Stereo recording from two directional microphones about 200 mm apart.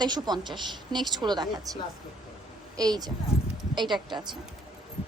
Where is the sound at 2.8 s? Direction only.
20° right (ahead or behind).